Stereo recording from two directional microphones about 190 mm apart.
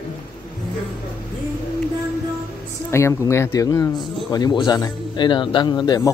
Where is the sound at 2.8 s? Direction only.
15° left (ahead or behind).